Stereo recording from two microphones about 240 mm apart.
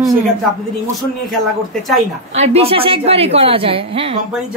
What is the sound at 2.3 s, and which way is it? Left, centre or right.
A woman's voice, right.